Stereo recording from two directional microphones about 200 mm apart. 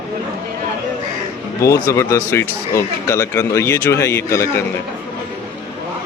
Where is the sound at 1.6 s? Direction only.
15° left (ahead or behind).